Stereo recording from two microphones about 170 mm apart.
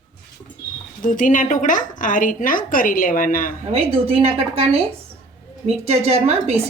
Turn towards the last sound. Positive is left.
turn(degrees=-35)  # may be behind; listen again after turning